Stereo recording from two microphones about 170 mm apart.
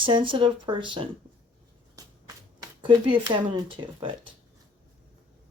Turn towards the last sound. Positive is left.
turn(degrees=-30)  # may be behind; listen again after turning